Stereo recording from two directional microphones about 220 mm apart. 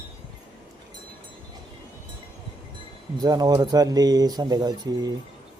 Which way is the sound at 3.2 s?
15° right (ahead or behind).